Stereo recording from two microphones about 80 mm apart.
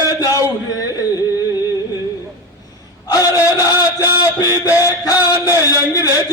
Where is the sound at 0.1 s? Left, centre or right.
Left.